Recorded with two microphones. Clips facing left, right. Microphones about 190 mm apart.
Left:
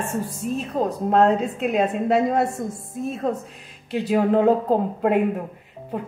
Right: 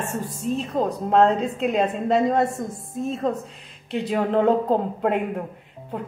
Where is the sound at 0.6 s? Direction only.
5° left (ahead or behind).